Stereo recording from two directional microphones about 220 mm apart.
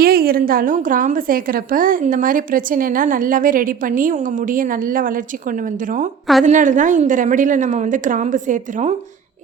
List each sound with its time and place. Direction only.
0.0 s a woman's voice: 40° right (ahead or behind)